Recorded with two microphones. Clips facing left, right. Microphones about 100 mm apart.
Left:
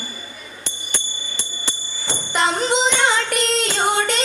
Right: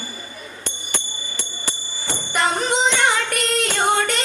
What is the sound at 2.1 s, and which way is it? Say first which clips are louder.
Music: left 1 dB; 20° left (ahead or behind).